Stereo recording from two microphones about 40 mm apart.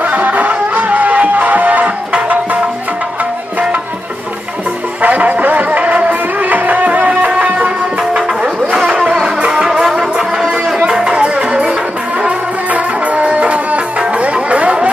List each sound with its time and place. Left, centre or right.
0.0 s music: right
5.0 s music: right
9.5 s music: centre
12.6 s music: right